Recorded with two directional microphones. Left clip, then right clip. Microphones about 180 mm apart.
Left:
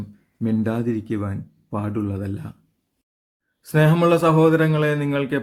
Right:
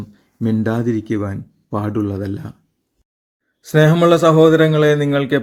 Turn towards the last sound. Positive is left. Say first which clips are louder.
# right 7 dB
turn(degrees=-25)  # may be behind; listen again after turning